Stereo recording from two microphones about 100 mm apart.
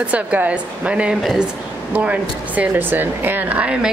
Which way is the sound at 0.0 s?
15° right (ahead or behind).